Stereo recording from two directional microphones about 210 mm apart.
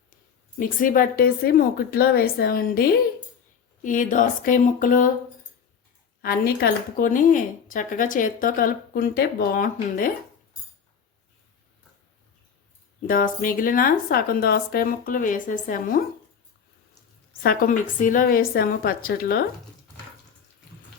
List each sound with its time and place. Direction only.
0.6 s a woman's voice: 40° left (ahead or behind)
6.2 s a woman's voice: 45° left (ahead or behind)
13.1 s a woman's voice: 40° left (ahead or behind)
17.4 s a woman's voice: 45° left (ahead or behind)